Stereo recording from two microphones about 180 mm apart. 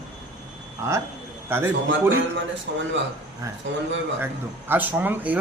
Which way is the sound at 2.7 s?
85° right.